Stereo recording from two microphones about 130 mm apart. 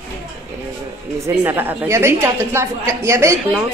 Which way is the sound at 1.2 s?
15° right (ahead or behind).